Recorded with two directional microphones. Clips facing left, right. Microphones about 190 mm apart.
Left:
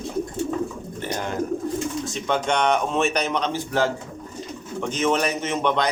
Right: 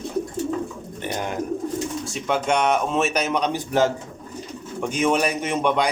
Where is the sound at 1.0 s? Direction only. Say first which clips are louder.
Right 1 dB; 15° right (ahead or behind).